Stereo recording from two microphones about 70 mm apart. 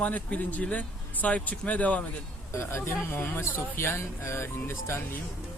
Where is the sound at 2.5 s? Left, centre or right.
Left.